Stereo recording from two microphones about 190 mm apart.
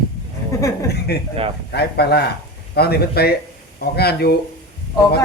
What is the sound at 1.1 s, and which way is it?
Speech, 55° left (ahead or behind).